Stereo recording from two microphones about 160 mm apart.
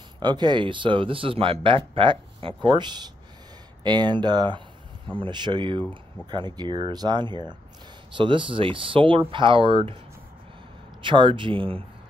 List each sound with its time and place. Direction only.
0.2 s speech: 30° right (ahead or behind)
11.0 s speech: 30° right (ahead or behind)